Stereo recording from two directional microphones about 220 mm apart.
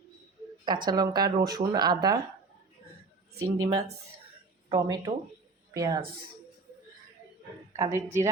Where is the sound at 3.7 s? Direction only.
30° right (ahead or behind).